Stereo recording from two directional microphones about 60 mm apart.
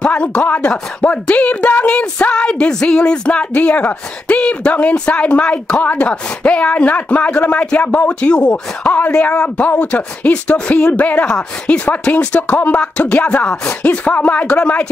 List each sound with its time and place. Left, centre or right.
0.0 s speech: centre